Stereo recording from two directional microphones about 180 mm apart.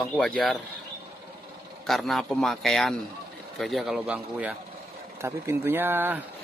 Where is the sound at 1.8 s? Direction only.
Centre (ahead or behind).